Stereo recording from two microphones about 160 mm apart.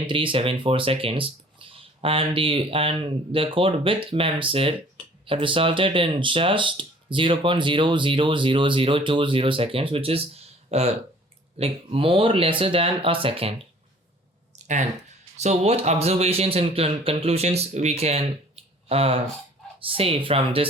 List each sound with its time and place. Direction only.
0.1 s speech: 30° right (ahead or behind)
15.4 s speech: 40° right (ahead or behind)